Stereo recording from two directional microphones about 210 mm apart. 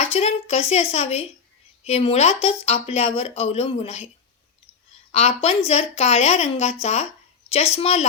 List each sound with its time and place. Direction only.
0.1 s speech: 30° left (ahead or behind)
5.1 s a woman's voice: 30° left (ahead or behind)